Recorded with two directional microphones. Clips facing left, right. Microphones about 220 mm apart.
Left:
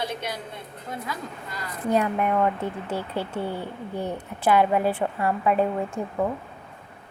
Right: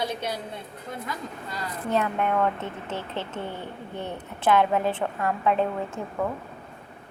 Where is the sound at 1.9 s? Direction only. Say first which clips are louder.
Left 3 dB; 10° left (ahead or behind).